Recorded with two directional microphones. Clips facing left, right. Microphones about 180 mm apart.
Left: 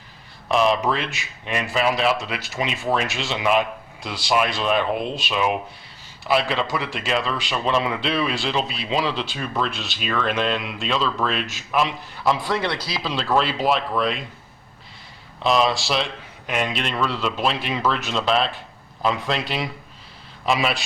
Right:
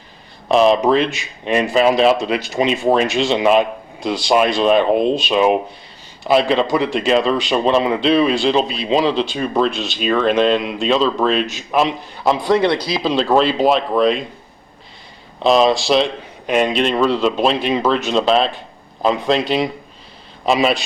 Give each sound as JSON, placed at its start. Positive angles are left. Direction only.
{"t": 0.4, "sound": "speech", "side_deg": -25}
{"t": 15.4, "sound": "speech", "side_deg": -25}